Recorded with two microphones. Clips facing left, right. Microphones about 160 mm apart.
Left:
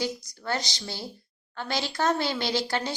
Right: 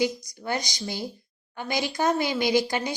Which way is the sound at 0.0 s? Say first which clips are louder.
Right 5 dB; 15° right (ahead or behind).